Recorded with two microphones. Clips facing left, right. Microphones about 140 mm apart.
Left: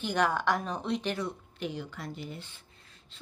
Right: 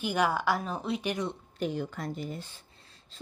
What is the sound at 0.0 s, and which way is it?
Speech, 10° right (ahead or behind).